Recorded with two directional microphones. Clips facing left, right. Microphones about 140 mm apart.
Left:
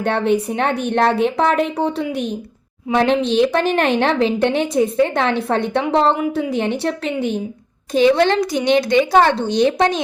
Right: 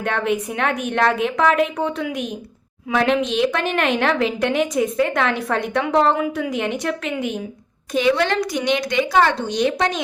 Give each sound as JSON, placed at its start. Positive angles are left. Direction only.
{"t": 0.0, "sound": "a woman's voice", "side_deg": 30}